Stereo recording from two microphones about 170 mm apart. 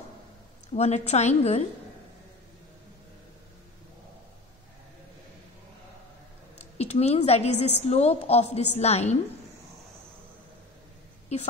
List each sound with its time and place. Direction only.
0.7 s a woman's voice: 40° left (ahead or behind)
6.8 s a woman's voice: 40° left (ahead or behind)